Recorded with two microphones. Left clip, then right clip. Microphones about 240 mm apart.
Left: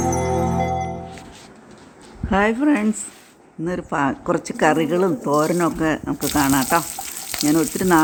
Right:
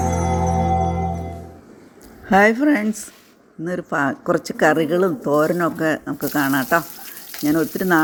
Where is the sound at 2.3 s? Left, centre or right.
Centre.